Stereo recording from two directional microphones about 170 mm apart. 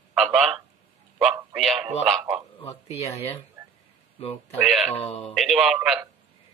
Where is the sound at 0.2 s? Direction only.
Centre (ahead or behind).